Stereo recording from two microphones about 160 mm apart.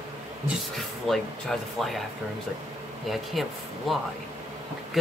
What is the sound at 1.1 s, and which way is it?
Speech, centre (ahead or behind).